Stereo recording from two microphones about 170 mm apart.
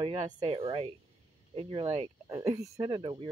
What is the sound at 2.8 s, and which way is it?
Speech, 25° right (ahead or behind).